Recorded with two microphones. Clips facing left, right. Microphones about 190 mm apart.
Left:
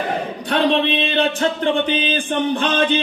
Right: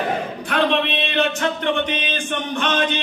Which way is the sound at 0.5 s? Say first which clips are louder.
Left 3 dB; 35° left (ahead or behind).